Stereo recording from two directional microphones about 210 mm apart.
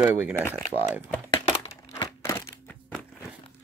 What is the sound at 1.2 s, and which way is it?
Crumpling, 15° left (ahead or behind).